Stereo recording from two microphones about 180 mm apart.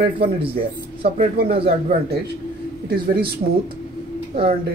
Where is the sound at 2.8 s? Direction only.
55° right (ahead or behind).